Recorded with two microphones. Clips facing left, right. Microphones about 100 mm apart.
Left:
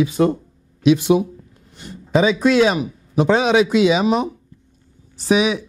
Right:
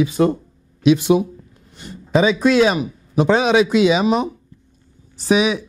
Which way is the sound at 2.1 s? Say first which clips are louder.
Even; 15° right (ahead or behind).